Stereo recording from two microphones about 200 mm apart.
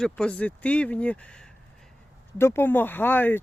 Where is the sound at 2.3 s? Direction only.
10° left (ahead or behind).